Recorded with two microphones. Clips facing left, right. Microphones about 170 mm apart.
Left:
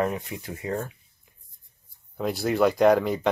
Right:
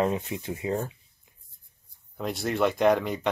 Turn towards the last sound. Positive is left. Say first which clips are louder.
# left 3 dB
turn(degrees=0)  # may be behind; listen again after turning